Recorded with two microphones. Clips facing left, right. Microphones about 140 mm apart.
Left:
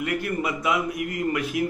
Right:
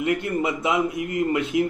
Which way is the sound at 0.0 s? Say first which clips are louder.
Right 3 dB; 25° right (ahead or behind).